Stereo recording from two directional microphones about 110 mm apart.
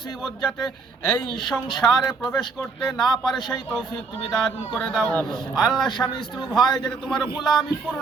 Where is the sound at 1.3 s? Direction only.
Centre (ahead or behind).